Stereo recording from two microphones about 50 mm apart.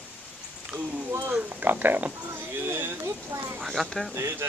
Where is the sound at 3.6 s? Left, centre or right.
Centre.